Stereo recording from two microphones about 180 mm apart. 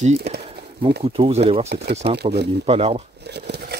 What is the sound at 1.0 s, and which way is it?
Speech, 30° right (ahead or behind).